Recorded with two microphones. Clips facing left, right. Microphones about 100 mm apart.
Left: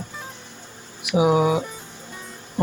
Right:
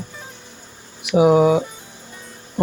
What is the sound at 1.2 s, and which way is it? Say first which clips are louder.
Speech: right 5 dB; 35° right (ahead or behind).